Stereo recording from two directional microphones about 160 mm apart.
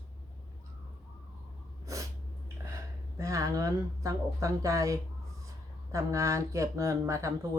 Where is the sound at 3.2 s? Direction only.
20° right (ahead or behind).